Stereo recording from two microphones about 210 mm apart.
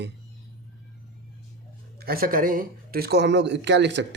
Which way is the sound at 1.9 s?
45° right (ahead or behind).